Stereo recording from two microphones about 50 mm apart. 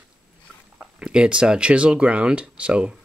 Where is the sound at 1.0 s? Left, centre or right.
Centre.